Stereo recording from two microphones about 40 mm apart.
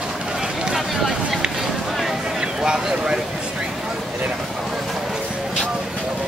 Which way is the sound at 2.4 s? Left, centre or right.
Centre.